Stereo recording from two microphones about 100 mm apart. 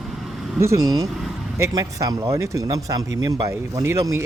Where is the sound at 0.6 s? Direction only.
35° right (ahead or behind).